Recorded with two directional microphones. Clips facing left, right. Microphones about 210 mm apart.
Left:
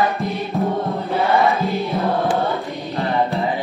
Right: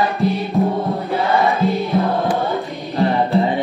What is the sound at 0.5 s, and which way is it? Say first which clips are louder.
Music: right 3 dB; 15° right (ahead or behind).